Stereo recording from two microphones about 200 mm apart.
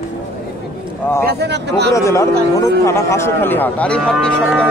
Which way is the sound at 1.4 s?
55° right (ahead or behind).